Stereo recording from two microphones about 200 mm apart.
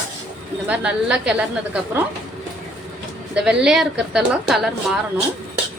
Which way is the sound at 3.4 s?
Centre (ahead or behind).